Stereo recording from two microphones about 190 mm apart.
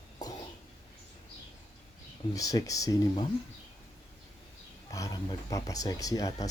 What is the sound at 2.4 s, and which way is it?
Speech, 20° left (ahead or behind).